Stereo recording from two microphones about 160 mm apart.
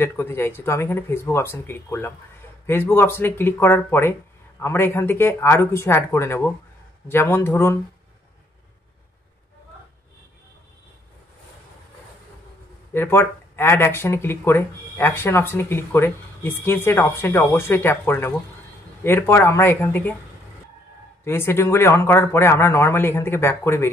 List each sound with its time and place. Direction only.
0.0 s speech: 15° left (ahead or behind)
12.9 s speech: 15° left (ahead or behind)
21.2 s speech: 15° left (ahead or behind)